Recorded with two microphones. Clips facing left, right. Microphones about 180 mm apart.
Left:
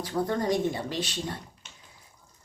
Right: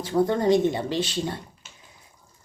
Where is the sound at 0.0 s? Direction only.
25° right (ahead or behind).